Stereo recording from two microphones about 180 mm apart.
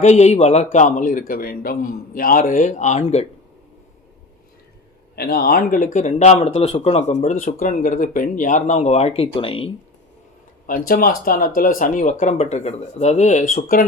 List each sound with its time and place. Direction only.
0.0 s a man's voice: 40° left (ahead or behind)
5.1 s speech: 60° left (ahead or behind); by 9.6 s 30° left (ahead or behind)
10.7 s a man's voice: 55° left (ahead or behind)